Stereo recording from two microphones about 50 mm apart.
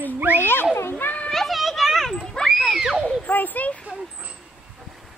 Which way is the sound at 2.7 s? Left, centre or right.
Centre.